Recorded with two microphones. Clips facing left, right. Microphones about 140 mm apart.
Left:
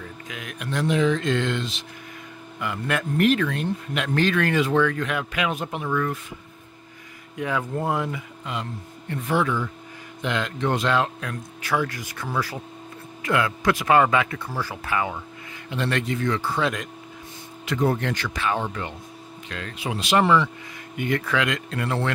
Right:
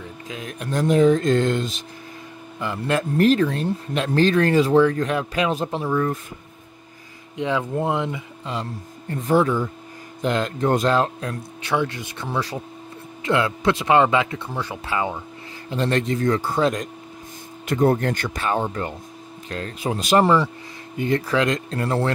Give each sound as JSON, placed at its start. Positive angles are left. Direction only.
{"t": 0.0, "sound": "speech", "side_deg": -30}
{"t": 2.6, "sound": "speech", "side_deg": -30}
{"t": 7.3, "sound": "speech", "side_deg": -25}